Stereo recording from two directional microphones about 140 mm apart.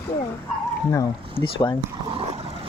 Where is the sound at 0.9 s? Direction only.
20° left (ahead or behind).